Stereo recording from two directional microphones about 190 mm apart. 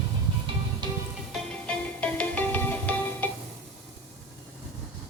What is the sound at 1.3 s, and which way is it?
Music, 5° left (ahead or behind).